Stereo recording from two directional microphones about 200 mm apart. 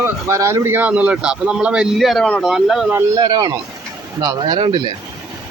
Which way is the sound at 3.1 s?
20° right (ahead or behind).